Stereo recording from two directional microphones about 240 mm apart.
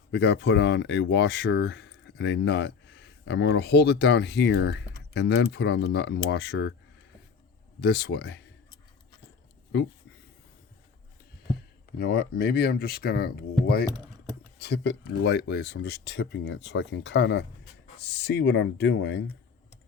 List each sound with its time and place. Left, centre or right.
0.1 s speech: left
7.8 s speech: left
11.9 s speech: left